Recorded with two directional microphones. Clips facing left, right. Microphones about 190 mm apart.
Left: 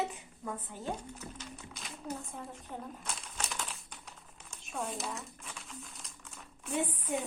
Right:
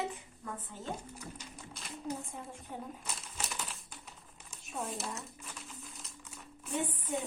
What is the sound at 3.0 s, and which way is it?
Crumpling, 5° right (ahead or behind).